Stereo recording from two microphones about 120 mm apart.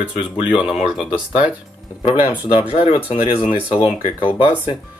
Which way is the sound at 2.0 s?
50° left (ahead or behind).